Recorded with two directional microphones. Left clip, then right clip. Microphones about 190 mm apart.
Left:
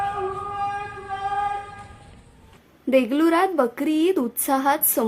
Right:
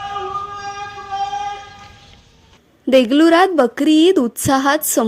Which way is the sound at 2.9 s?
30° right (ahead or behind).